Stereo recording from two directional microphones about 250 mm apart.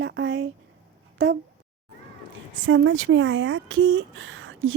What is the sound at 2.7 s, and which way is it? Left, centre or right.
Speech, right.